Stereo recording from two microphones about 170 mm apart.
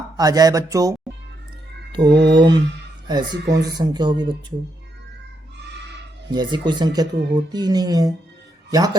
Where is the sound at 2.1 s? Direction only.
85° right.